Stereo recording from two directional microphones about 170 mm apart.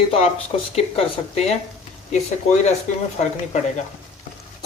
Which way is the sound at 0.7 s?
40° left (ahead or behind).